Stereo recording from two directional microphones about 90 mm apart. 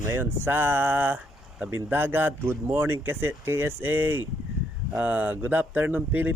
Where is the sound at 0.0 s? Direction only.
25° right (ahead or behind).